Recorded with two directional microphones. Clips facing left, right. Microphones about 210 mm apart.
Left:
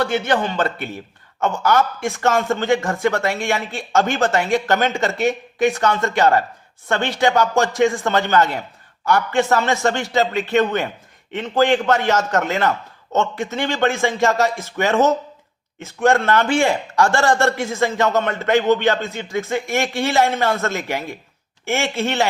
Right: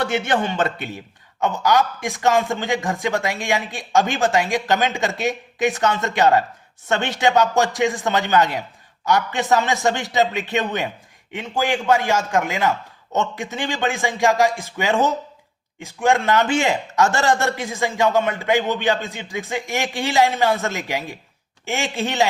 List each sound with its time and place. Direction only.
0.0 s a man's voice: 25° right (ahead or behind)